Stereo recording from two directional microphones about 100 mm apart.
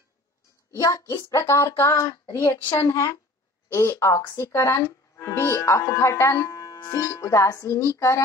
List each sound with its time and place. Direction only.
0.7 s speech: 30° left (ahead or behind)